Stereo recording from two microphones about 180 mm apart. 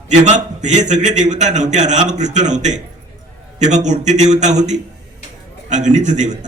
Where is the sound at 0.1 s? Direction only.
40° right (ahead or behind).